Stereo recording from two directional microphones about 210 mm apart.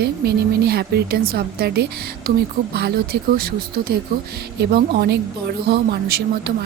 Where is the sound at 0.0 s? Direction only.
50° right (ahead or behind).